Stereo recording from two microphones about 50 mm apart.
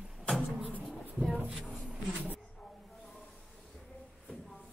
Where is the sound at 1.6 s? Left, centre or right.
Centre.